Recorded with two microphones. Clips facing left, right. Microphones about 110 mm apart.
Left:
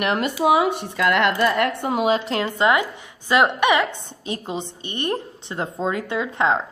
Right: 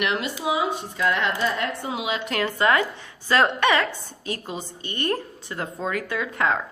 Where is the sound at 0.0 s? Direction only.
45° left (ahead or behind).